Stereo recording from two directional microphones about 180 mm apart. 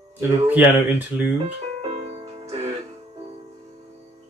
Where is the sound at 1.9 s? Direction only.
35° right (ahead or behind).